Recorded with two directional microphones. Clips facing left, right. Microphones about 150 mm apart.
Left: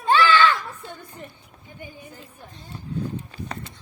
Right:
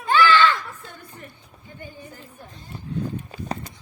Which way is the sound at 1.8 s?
15° left (ahead or behind).